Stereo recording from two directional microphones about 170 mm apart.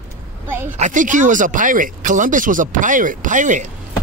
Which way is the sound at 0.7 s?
50° right (ahead or behind).